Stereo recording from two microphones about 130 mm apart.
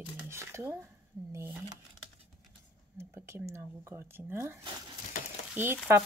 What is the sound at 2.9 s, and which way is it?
Speech, 20° right (ahead or behind).